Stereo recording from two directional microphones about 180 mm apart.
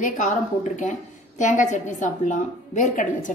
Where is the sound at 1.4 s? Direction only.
40° left (ahead or behind).